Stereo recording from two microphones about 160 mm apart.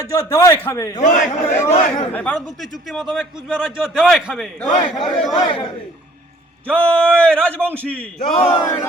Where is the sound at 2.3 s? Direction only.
Centre (ahead or behind).